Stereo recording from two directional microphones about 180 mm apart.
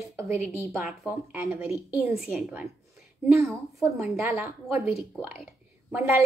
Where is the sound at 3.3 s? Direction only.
15° right (ahead or behind).